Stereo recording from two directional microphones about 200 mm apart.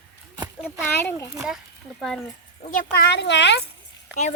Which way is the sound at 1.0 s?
10° left (ahead or behind).